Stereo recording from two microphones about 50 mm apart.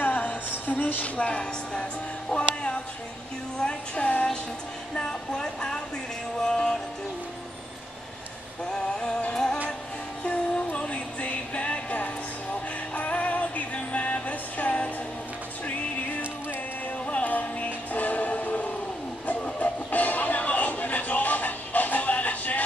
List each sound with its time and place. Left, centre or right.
0.0 s music: left
1.0 s a woman's voice: left
4.9 s music: centre
8.7 s music: centre
17.0 s music: left